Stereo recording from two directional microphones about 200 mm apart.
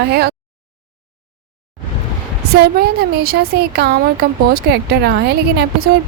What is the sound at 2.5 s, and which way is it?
A woman's voice, 50° right (ahead or behind).